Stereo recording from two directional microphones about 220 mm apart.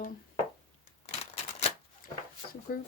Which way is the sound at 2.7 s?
45° left (ahead or behind).